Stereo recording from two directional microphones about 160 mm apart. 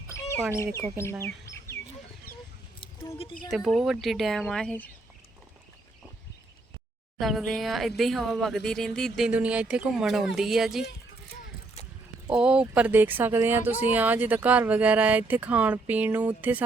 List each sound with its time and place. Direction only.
0.1 s bird: 15° left (ahead or behind)
0.8 s speech: 15° left (ahead or behind)
3.5 s speech: centre (ahead or behind)
7.2 s speech: centre (ahead or behind)
12.3 s speech: 5° right (ahead or behind)